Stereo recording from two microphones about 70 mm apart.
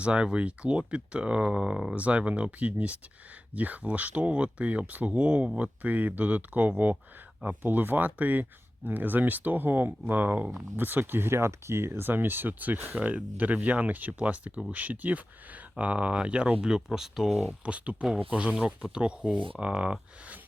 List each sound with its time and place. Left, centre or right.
0.0 s speech: centre
17.7 s speech: centre